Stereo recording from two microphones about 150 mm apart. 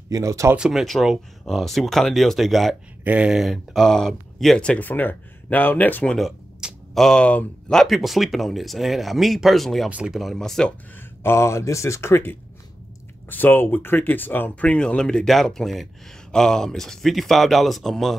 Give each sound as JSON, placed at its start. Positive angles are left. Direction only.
{"t": 0.1, "sound": "speech", "side_deg": -20}
{"t": 0.6, "sound": "speech", "side_deg": -5}
{"t": 6.1, "sound": "speech", "side_deg": 0}
{"t": 11.0, "sound": "speech", "side_deg": 15}